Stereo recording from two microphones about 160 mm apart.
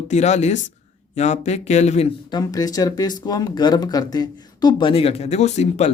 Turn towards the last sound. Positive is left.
turn(degrees=45)  # may be behind; listen again after turning